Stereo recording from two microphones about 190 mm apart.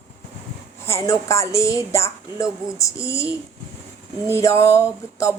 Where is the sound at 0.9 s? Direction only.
15° left (ahead or behind).